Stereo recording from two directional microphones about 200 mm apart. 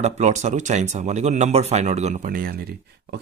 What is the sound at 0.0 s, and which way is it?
Speech, 35° right (ahead or behind).